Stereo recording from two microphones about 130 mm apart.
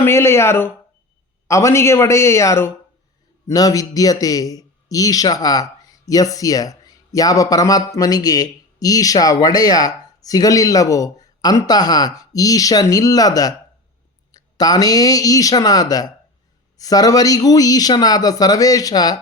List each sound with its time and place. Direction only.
0.0 s a man's voice: 20° left (ahead or behind)